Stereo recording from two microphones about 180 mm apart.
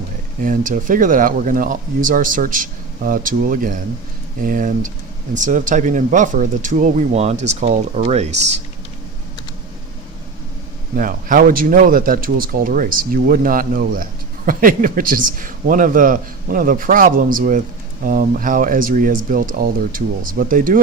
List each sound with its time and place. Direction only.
0.4 s speech: 50° right (ahead or behind)
10.9 s speech: 50° right (ahead or behind)